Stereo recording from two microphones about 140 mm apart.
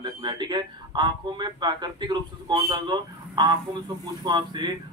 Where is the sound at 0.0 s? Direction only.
30° right (ahead or behind).